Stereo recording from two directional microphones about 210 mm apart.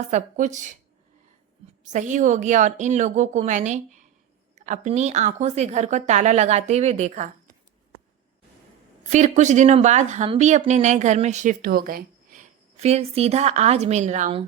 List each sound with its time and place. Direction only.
0.1 s speech: 35° right (ahead or behind)
1.8 s speech: 35° right (ahead or behind)
9.0 s speech: 35° right (ahead or behind)